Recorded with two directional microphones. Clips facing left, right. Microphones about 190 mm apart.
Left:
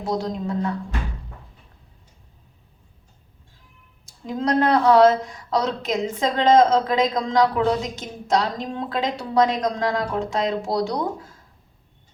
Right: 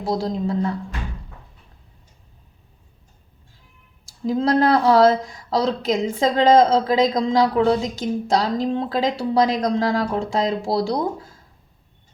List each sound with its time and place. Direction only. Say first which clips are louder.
0.0 s a woman's voice: right 2 dB; 30° right (ahead or behind)
4.3 s a woman's voice: right 3 dB; 30° right (ahead or behind)